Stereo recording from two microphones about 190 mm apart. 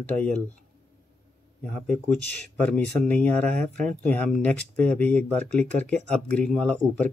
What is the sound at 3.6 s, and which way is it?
Speech, 40° right (ahead or behind).